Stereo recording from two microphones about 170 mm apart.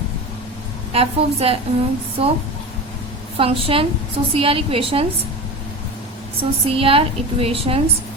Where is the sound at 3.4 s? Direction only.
35° right (ahead or behind).